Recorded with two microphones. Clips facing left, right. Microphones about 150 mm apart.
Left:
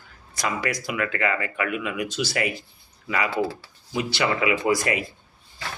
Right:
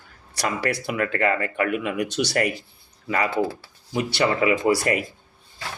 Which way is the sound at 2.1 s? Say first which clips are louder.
Right 3 dB; 70° right (ahead or behind).